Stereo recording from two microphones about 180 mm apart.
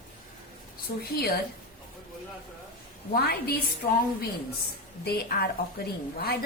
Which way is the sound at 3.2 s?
60° left (ahead or behind).